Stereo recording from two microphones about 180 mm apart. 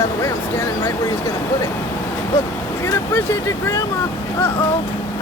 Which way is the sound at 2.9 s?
15° left (ahead or behind).